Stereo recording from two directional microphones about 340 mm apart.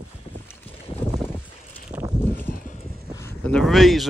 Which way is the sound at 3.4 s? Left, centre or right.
Centre.